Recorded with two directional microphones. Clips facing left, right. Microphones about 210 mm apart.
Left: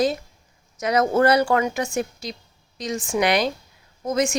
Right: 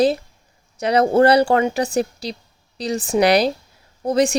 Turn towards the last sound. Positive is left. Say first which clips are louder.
# right 5 dB
turn(degrees=-35)  # may be behind; listen again after turning